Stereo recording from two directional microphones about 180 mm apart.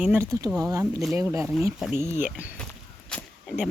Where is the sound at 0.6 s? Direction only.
20° right (ahead or behind).